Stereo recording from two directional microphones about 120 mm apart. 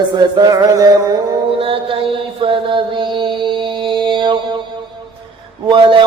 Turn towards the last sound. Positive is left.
turn(degrees=-40)  # may be behind; listen again after turning